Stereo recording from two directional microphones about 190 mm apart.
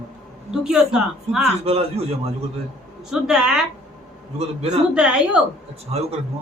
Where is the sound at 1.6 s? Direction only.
30° right (ahead or behind).